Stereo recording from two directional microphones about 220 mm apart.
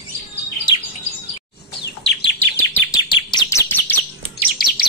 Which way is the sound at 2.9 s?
20° left (ahead or behind).